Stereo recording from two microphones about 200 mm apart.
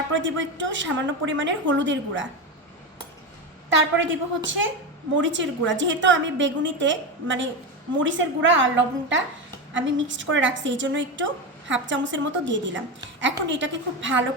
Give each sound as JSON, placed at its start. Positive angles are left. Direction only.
{"t": 0.1, "sound": "a woman's voice", "side_deg": -70}
{"t": 3.9, "sound": "a woman's voice", "side_deg": -70}